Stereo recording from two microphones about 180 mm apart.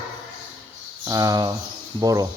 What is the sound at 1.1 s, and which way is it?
A man's voice, 20° right (ahead or behind).